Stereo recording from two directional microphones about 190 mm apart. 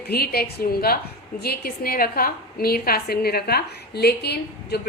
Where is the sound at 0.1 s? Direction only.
55° left (ahead or behind).